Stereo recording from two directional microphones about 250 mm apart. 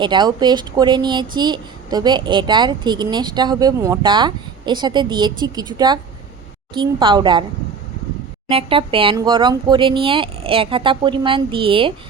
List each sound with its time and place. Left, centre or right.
0.0 s speech: centre
8.4 s speech: right